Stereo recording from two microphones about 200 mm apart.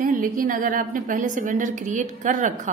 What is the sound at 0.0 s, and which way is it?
A woman's voice, 45° right (ahead or behind).